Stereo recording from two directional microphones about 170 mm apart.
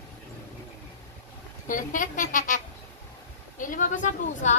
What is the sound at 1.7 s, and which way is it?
A woman's voice, 50° left (ahead or behind).